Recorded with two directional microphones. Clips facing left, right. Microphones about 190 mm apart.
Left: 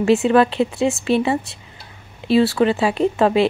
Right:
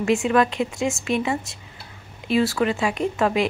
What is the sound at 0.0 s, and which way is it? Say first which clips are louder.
Speech: left 5 dB; 35° left (ahead or behind).